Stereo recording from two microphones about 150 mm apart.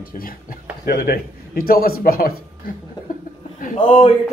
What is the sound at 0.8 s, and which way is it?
Speech, 80° left.